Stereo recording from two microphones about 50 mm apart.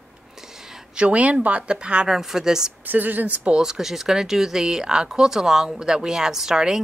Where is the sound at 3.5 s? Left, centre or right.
Centre.